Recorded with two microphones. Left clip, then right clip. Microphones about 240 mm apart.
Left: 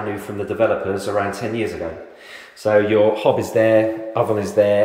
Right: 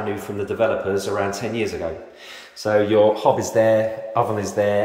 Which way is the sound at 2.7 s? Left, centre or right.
Centre.